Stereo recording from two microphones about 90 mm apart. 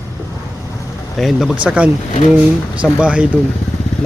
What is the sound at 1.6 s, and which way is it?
Speech, 15° right (ahead or behind).